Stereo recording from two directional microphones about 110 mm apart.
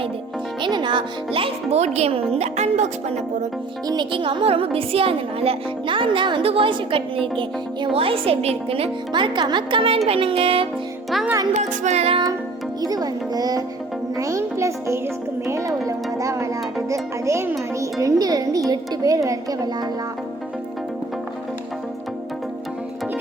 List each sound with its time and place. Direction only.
0.6 s a child's voice: 45° right (ahead or behind); by 3.2 s 90° right
3.8 s a woman's voice: 45° right (ahead or behind)
11.5 s music: 90° right; by 12.2 s 70° right (ahead or behind)
12.8 s speech: 35° right (ahead or behind)
14.2 s music: 30° right (ahead or behind)
18.0 s speech: 35° right (ahead or behind)